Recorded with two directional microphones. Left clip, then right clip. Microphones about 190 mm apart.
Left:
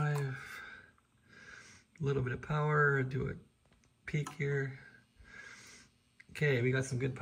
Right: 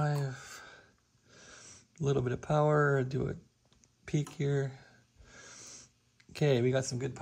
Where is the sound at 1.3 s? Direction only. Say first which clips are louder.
Even; 10° right (ahead or behind).